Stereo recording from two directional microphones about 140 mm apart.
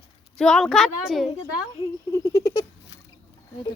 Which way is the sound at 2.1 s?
25° left (ahead or behind).